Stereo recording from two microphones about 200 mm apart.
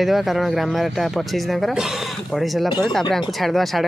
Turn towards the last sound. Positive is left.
turn(degrees=0)  # may be behind; listen again after turning